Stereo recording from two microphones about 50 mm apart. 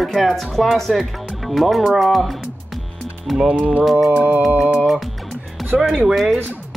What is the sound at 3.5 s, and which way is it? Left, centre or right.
Speech, right.